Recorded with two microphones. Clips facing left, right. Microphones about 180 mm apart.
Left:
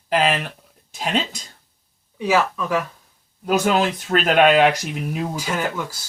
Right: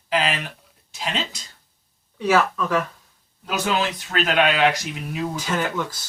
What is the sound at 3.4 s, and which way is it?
Speech, 50° left (ahead or behind).